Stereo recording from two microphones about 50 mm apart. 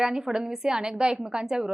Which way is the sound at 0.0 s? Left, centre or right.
Centre.